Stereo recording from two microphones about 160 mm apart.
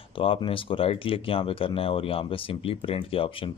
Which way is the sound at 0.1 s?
35° left (ahead or behind).